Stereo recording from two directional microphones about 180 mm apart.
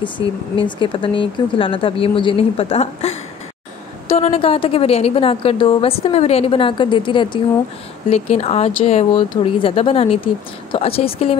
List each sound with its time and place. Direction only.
0.6 s a woman's voice: 25° left (ahead or behind)